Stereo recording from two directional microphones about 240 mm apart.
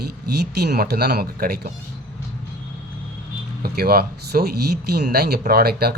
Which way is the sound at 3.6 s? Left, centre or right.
Right.